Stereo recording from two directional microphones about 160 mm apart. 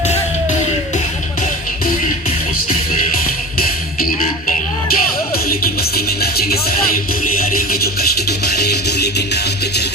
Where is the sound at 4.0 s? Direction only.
60° left (ahead or behind).